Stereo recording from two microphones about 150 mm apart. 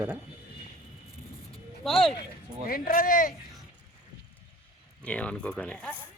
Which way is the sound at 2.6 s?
75° left (ahead or behind).